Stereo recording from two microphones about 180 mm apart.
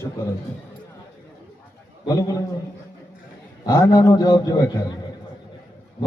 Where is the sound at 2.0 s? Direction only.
20° left (ahead or behind).